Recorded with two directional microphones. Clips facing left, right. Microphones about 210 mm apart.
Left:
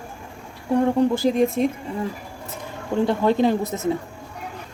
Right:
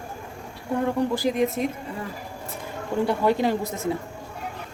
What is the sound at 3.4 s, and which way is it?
Speech, 20° left (ahead or behind).